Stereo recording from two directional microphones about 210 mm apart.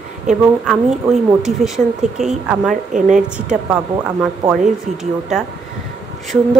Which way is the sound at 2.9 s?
35° right (ahead or behind).